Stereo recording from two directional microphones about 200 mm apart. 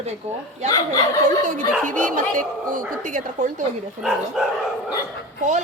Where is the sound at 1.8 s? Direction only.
40° right (ahead or behind).